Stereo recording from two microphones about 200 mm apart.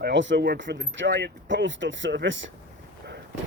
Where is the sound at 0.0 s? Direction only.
65° right (ahead or behind).